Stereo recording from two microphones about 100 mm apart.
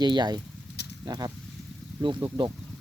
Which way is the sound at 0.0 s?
45° right (ahead or behind).